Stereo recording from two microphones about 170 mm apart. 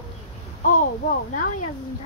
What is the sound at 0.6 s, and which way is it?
Speech, 50° left (ahead or behind).